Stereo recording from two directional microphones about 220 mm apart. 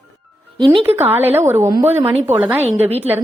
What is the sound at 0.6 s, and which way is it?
Speech, 20° right (ahead or behind).